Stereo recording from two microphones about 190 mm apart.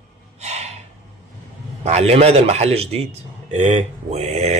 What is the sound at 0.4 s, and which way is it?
Gasp, 35° right (ahead or behind).